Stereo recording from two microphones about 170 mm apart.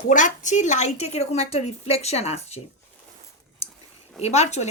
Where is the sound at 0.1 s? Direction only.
50° left (ahead or behind).